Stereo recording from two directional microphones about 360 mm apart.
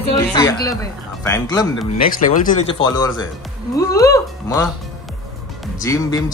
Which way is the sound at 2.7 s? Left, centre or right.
Centre.